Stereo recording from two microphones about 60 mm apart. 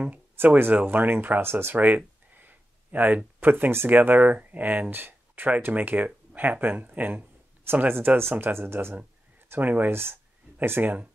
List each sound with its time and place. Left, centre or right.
0.0 s speech: right
1.8 s speech: right
9.5 s speech: right